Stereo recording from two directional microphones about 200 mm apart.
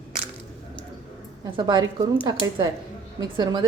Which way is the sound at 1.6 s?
20° right (ahead or behind).